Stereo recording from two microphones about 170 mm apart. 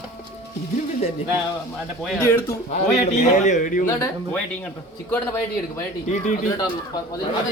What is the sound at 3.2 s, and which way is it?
Speech, 45° left (ahead or behind).